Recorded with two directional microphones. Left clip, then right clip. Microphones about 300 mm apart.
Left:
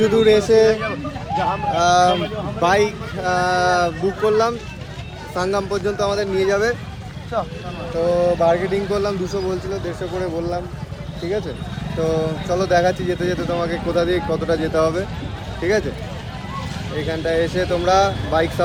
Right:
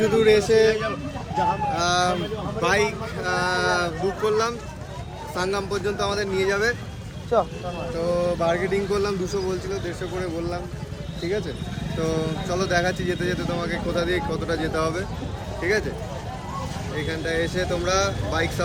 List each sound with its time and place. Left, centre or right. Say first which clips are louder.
0.0 s speech: left 4 dB; centre
0.7 s speech: left 4 dB; centre
1.7 s speech: left 7 dB; centre
7.3 s speech: right 2 dB; right
8.0 s speech: left 7 dB; centre
11.9 s speech: left 6 dB; centre
17.1 s speech: left 6 dB; centre